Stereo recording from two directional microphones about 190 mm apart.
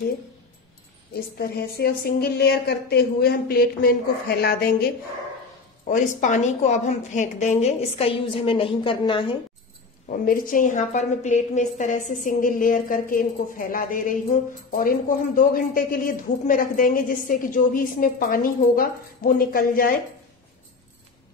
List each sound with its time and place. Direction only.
1.1 s a woman's voice: 55° left (ahead or behind)
5.9 s a woman's voice: 40° left (ahead or behind); by 9.4 s 25° left (ahead or behind)
10.0 s a woman's voice: 45° left (ahead or behind)